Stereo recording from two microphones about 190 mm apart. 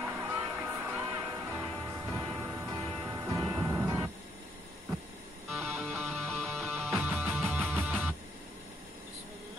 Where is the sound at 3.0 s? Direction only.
15° right (ahead or behind).